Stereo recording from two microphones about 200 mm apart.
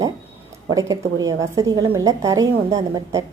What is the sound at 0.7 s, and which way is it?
A woman's voice, 15° right (ahead or behind).